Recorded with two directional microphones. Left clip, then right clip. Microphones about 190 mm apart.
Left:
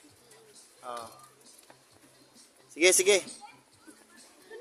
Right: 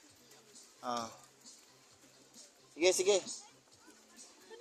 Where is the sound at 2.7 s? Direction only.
10° left (ahead or behind).